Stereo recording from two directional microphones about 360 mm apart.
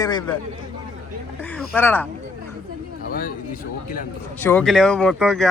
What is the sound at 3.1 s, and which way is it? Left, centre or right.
Speech, left.